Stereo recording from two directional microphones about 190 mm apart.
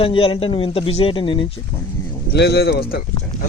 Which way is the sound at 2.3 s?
60° left (ahead or behind).